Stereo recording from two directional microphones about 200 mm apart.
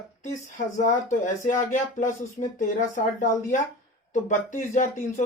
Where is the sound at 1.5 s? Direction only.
40° left (ahead or behind).